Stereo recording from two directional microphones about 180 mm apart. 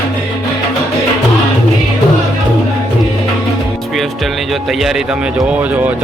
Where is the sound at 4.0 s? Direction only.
Centre (ahead or behind).